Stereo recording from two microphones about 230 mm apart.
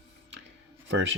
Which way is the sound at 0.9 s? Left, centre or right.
Right.